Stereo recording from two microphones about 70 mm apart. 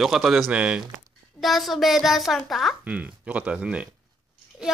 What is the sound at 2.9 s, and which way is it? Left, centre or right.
Speech, centre.